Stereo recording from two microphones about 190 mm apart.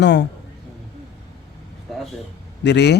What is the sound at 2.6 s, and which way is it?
Speech, 65° left (ahead or behind).